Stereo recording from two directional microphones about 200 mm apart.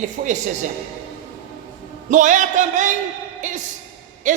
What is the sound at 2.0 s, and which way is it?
Speech, 40° right (ahead or behind).